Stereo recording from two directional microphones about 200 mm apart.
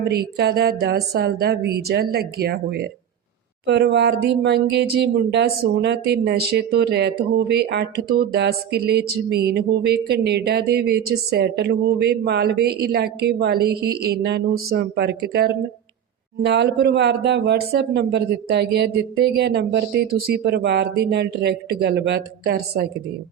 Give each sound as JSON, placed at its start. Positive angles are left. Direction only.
{"t": 0.0, "sound": "speech", "side_deg": -55}
{"t": 20.6, "sound": "speech", "side_deg": -60}